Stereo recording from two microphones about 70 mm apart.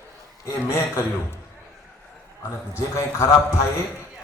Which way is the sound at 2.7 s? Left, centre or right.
Left.